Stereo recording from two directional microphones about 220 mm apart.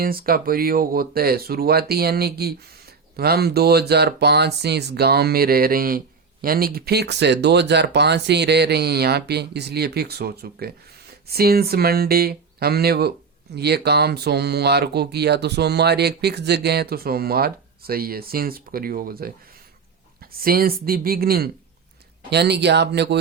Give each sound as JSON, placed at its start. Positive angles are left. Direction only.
{"t": 0.0, "sound": "speech", "side_deg": -40}
{"t": 20.3, "sound": "speech", "side_deg": -40}